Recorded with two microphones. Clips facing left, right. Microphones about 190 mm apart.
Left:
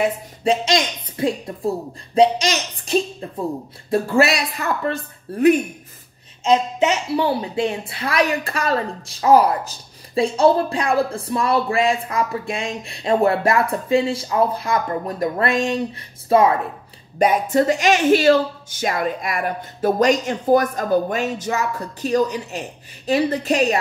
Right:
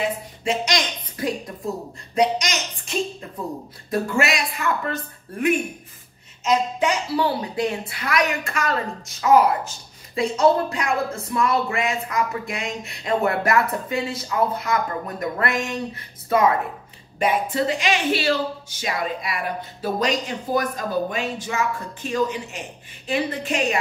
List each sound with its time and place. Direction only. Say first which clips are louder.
0.4 s speech: left 6 dB; 30° left (ahead or behind)
17.2 s speech: left 5 dB; 45° left (ahead or behind)